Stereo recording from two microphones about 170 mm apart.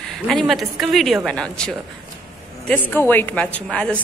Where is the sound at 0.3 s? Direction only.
Centre (ahead or behind).